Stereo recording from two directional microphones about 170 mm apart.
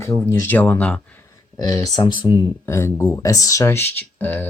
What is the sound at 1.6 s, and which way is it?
Speech, 20° left (ahead or behind).